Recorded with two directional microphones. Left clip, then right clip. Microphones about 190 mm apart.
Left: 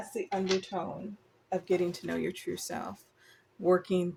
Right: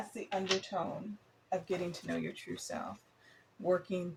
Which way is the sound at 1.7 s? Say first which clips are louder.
Left 7 dB; 65° left (ahead or behind).